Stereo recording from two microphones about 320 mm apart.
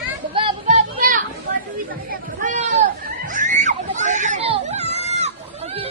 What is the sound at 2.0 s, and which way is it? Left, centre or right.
Children playing, right.